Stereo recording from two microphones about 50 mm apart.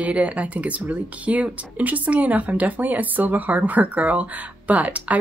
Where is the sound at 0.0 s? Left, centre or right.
Right.